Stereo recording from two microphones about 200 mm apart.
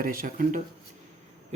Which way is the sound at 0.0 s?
45° right (ahead or behind).